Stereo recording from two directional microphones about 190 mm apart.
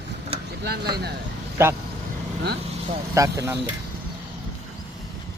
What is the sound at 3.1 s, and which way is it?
Speech, 15° right (ahead or behind).